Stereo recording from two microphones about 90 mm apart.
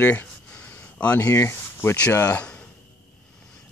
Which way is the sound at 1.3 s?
25° left (ahead or behind).